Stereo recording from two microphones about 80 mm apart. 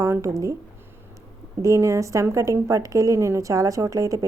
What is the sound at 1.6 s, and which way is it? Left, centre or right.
Speech, right.